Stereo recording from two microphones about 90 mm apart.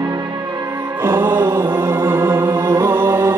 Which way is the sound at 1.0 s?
25° right (ahead or behind).